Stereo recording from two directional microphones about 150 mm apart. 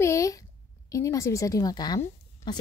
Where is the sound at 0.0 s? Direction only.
20° left (ahead or behind).